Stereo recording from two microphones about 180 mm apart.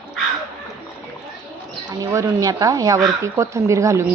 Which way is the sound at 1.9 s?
15° right (ahead or behind).